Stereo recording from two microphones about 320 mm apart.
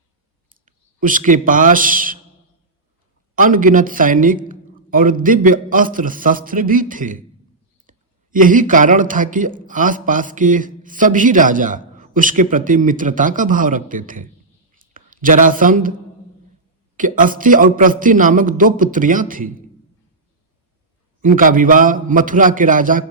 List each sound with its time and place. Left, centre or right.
0.5 s a man's voice: right
3.3 s a woman's voice: right
17.0 s speech: right
21.2 s speech: right